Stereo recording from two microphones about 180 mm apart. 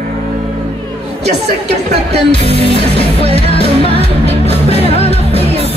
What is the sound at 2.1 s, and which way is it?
Music, 35° right (ahead or behind).